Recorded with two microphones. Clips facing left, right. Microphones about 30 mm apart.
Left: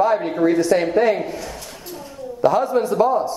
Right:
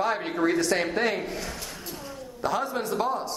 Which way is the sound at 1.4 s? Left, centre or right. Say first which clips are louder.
Left 3 dB; centre.